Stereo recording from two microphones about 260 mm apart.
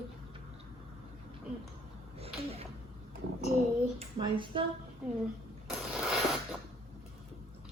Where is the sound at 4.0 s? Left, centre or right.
Centre.